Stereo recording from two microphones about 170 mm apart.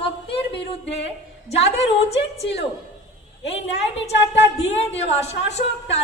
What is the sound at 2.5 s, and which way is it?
Speech, 90° left.